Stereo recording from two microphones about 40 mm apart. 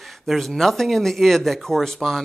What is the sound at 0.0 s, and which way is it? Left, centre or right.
A man's voice, centre.